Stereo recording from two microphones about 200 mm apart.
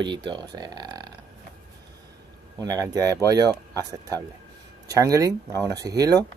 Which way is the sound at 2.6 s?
15° right (ahead or behind).